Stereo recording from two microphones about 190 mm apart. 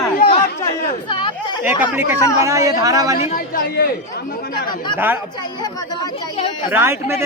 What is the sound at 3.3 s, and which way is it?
Speech, 50° left (ahead or behind).